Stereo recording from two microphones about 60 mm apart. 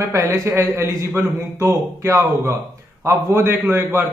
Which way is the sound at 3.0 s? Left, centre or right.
Right.